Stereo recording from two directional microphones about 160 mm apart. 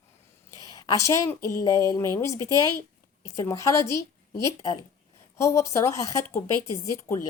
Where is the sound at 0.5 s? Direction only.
20° left (ahead or behind).